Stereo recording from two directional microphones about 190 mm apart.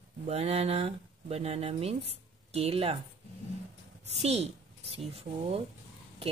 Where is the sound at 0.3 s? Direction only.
35° right (ahead or behind).